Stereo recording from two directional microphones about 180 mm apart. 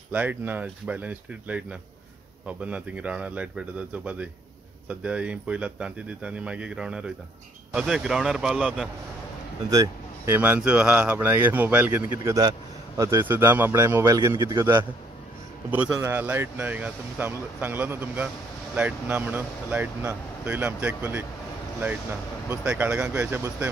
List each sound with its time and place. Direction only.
0.1 s a man's voice: 10° right (ahead or behind)
9.7 s speech: 15° right (ahead or behind)
22.5 s speech: 10° right (ahead or behind)